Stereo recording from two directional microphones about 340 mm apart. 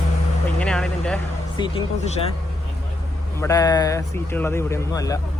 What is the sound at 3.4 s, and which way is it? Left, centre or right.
Speech, centre.